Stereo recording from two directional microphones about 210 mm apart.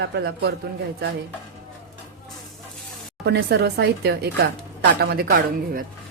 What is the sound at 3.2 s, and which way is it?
Speech, 50° right (ahead or behind).